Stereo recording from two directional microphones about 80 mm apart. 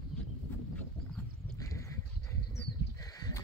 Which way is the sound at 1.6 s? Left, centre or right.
Left.